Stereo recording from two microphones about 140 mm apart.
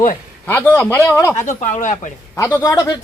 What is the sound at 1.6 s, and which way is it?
Speech, 70° left (ahead or behind).